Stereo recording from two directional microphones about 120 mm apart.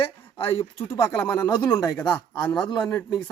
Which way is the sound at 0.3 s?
50° left (ahead or behind).